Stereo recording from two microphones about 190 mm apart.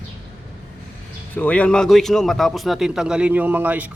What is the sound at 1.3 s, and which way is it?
A man's voice, 5° left (ahead or behind).